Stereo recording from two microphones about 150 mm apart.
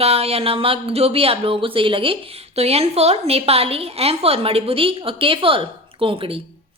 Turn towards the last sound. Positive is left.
turn(degrees=-35)  # may be behind; listen again after turning